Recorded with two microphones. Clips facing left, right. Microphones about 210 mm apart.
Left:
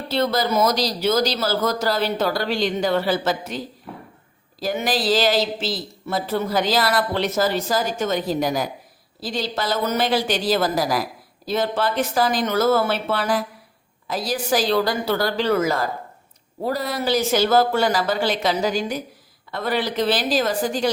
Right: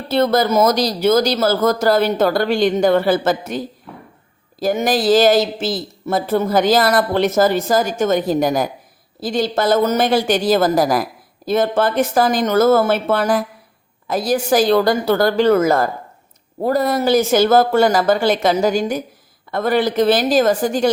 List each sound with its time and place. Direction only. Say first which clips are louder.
0.1 s speech: right 6 dB; 50° right (ahead or behind)
3.9 s a sound: even; 5° left (ahead or behind)
4.6 s speech: right 6 dB; 45° right (ahead or behind)